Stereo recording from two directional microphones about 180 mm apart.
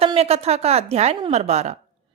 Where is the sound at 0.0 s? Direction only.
35° right (ahead or behind).